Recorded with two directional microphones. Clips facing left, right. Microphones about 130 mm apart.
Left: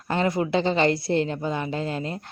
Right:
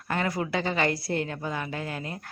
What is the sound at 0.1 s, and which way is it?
A woman's voice, 25° left (ahead or behind).